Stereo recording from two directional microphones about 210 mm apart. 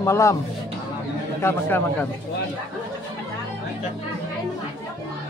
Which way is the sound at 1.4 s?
10° left (ahead or behind).